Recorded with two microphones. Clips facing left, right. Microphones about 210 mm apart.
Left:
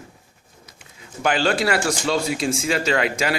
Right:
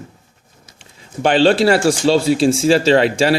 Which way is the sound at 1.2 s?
30° right (ahead or behind).